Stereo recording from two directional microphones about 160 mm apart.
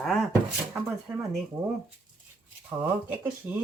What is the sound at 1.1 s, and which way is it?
Speech, 15° right (ahead or behind).